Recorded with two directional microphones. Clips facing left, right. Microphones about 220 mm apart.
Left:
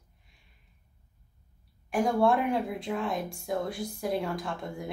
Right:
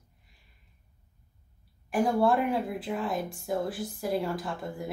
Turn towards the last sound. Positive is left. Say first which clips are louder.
# right 1 dB
turn(degrees=0)  # may be behind; listen again after turning